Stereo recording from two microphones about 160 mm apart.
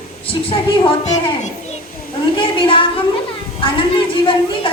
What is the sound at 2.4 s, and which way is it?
A woman's voice, 35° left (ahead or behind).